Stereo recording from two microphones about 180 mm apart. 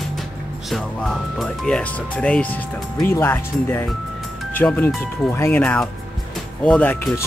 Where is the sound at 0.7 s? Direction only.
Centre (ahead or behind).